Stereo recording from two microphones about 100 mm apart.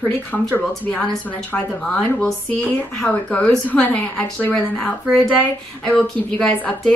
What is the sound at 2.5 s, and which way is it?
A woman's voice, 15° left (ahead or behind).